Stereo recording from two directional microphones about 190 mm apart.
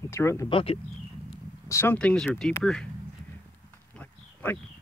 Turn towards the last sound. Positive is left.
turn(degrees=10)  # may be behind; listen again after turning